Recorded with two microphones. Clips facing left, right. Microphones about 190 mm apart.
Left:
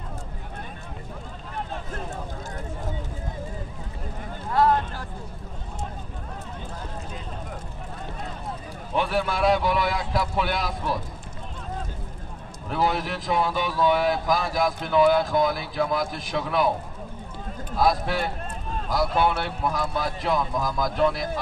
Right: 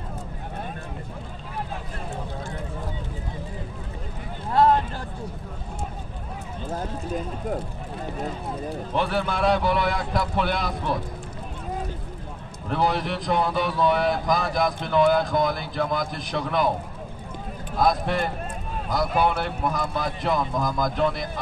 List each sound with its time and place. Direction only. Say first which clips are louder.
6.7 s run: right 7 dB; 45° right (ahead or behind)
8.9 s speech: left 1 dB; 5° left (ahead or behind)
12.6 s speech: right 1 dB; centre (ahead or behind)
17.7 s speech: right 1 dB; 5° left (ahead or behind)